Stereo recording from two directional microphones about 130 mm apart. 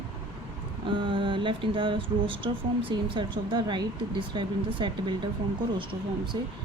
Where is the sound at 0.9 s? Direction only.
40° right (ahead or behind).